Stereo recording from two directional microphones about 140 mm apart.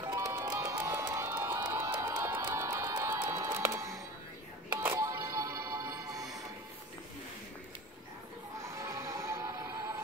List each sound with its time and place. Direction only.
0.0 s music: 25° right (ahead or behind)
1.7 s a sound: 20° right (ahead or behind)
4.7 s music: 20° right (ahead or behind)
8.6 s music: 20° right (ahead or behind)